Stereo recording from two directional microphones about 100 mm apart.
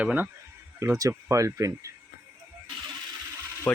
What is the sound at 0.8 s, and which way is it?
Speech, 30° right (ahead or behind).